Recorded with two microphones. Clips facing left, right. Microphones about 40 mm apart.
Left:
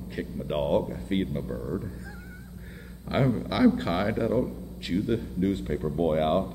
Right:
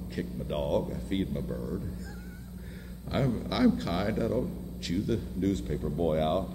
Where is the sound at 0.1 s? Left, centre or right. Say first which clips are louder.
Left 3 dB; centre.